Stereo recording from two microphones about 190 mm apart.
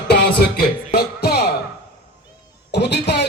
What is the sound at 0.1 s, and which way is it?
Music, 55° left (ahead or behind).